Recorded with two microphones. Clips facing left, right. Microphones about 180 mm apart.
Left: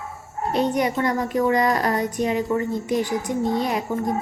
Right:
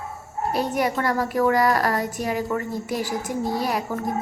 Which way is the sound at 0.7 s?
20° left (ahead or behind).